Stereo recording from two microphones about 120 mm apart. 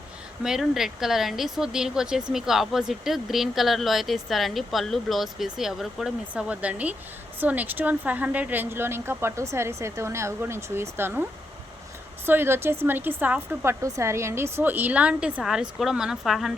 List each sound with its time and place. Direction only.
0.4 s a woman's voice: 5° right (ahead or behind)